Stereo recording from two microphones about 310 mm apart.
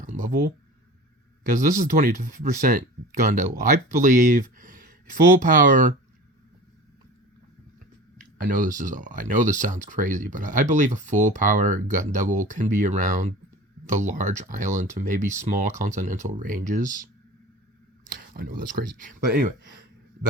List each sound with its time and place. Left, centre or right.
0.0 s a sound: right
1.5 s speech: right
8.4 s speech: right
18.2 s speech: right